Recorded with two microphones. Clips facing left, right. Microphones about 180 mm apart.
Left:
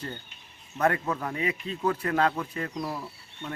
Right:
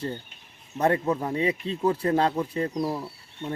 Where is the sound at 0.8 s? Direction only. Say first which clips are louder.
Right 3 dB; 25° right (ahead or behind).